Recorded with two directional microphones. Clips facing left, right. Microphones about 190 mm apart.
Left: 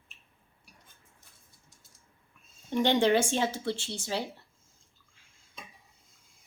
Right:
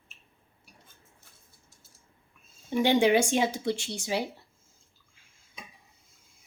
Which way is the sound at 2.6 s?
10° right (ahead or behind).